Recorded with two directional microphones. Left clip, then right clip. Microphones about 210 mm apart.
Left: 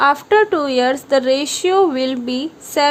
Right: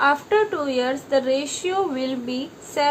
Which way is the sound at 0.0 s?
45° left (ahead or behind).